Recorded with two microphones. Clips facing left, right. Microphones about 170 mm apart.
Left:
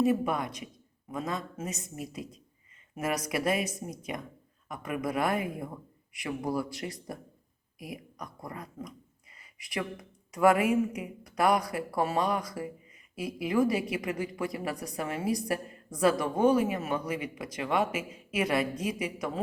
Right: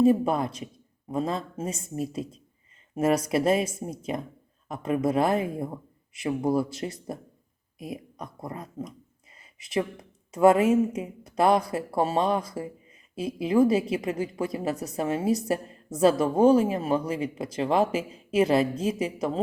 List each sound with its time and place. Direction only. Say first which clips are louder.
0.0 s a woman's voice: right 6 dB; 30° right (ahead or behind)